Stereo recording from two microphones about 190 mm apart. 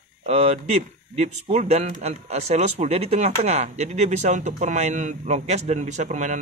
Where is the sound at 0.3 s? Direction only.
35° right (ahead or behind).